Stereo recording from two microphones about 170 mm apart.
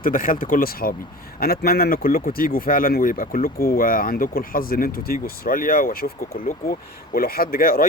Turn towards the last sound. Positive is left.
turn(degrees=55)  # may be behind; listen again after turning